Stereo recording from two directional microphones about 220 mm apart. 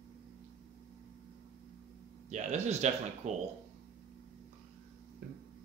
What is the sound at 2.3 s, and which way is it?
Speech, 30° right (ahead or behind).